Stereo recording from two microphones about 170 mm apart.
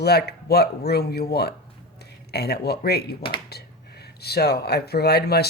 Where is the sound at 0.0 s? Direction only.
70° left (ahead or behind).